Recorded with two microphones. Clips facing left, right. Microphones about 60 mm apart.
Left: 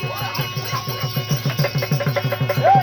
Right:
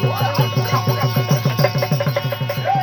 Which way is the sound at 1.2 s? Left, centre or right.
Right.